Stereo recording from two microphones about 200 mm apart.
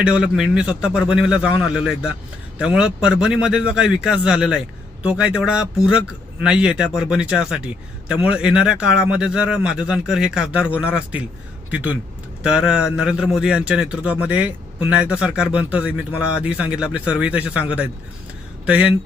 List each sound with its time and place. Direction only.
0.0 s a man's voice: 5° right (ahead or behind)